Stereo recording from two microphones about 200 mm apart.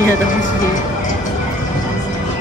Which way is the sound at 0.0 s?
40° left (ahead or behind).